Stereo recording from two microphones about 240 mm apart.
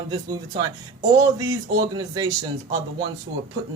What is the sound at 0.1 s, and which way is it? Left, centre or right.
Speech, centre.